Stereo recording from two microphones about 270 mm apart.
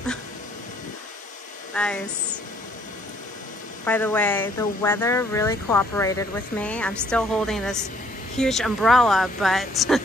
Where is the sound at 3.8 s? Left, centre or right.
Centre.